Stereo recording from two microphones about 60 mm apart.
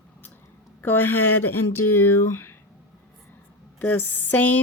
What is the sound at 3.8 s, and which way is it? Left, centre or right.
Speech, left.